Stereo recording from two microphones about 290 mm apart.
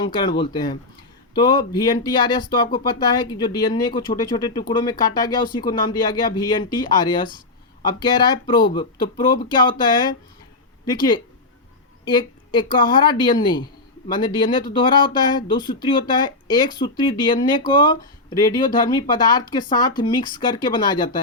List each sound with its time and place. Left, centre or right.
0.0 s speech: centre